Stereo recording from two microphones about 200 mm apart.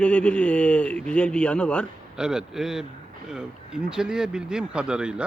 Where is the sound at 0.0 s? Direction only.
5° left (ahead or behind).